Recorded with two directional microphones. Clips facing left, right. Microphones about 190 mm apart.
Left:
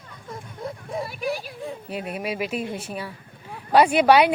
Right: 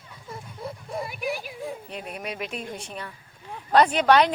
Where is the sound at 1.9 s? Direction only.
5° left (ahead or behind).